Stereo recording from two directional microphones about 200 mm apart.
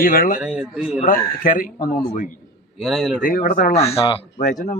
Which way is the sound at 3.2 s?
45° left (ahead or behind).